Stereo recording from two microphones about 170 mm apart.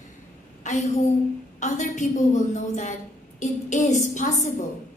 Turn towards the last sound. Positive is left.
turn(degrees=45)  # may be behind; listen again after turning